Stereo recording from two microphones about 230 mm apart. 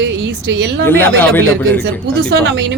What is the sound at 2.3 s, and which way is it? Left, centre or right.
Speech, right.